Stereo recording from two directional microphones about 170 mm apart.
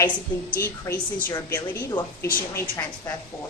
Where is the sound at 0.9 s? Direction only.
15° left (ahead or behind).